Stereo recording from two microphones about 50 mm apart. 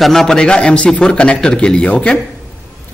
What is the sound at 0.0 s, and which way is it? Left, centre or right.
Speech, centre.